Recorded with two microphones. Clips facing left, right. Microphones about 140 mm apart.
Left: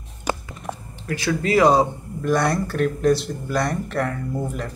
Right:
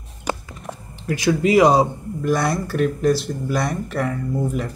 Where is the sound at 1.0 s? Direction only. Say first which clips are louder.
Right 4 dB; 15° right (ahead or behind).